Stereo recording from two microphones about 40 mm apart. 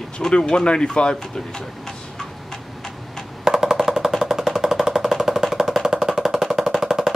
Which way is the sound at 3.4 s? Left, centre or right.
Centre.